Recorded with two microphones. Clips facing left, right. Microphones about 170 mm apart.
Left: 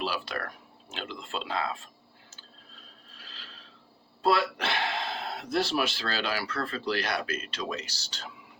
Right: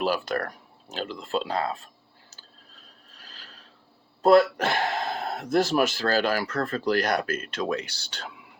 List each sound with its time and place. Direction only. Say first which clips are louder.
0.0 s speech: right 7 dB; 45° right (ahead or behind)
3.1 s a sound: right 1 dB; 45° right (ahead or behind)
4.2 s speech: right 8 dB; 45° right (ahead or behind); by 8.3 s 60° right (ahead or behind)